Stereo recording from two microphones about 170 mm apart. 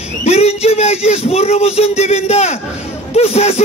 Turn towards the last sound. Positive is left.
turn(degrees=40)  # may be behind; listen again after turning